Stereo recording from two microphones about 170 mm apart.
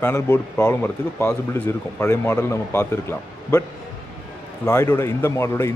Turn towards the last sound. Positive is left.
turn(degrees=15)  # may be behind; listen again after turning